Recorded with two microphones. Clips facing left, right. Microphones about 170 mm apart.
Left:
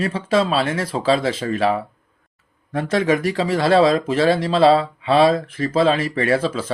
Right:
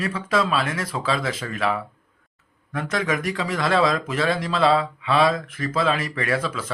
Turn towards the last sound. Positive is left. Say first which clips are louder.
# left 6 dB
turn(degrees=30)  # may be behind; listen again after turning